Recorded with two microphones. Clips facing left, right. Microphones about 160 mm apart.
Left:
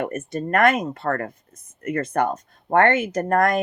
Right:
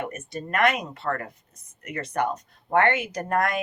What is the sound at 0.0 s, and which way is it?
Speech, 50° left (ahead or behind).